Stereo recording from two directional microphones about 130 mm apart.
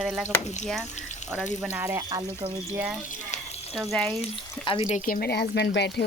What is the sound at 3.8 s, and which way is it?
Speech, 5° left (ahead or behind).